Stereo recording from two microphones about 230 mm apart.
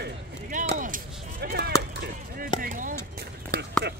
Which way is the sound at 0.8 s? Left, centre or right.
Right.